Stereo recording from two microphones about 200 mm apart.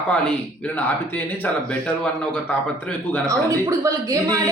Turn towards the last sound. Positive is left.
turn(degrees=-15)  # may be behind; listen again after turning